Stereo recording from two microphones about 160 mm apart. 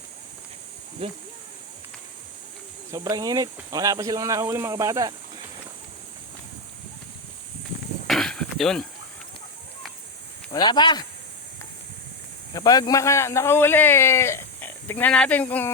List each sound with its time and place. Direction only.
1.0 s speech: 35° right (ahead or behind)
2.9 s speech: 20° right (ahead or behind)
8.0 s a sound: centre (ahead or behind)
10.5 s speech: 30° left (ahead or behind)
12.5 s a man's voice: 25° left (ahead or behind)